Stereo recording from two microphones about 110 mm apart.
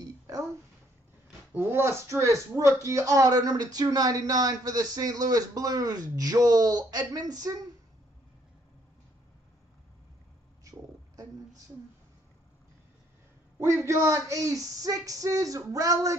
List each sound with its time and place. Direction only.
1.5 s speech: 20° right (ahead or behind)
10.6 s a sound: 30° right (ahead or behind)
13.8 s speech: 25° right (ahead or behind)